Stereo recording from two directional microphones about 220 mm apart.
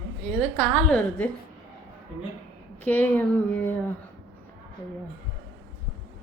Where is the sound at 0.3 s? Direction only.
5° left (ahead or behind).